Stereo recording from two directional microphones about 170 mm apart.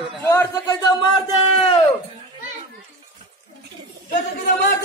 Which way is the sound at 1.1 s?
35° left (ahead or behind).